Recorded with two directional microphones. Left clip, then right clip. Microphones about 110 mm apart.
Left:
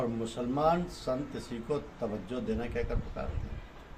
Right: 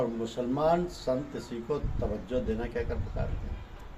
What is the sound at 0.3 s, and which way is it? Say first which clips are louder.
Speech: right 1 dB; 20° left (ahead or behind).